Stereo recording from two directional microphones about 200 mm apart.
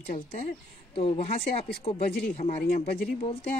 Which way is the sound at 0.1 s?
35° left (ahead or behind).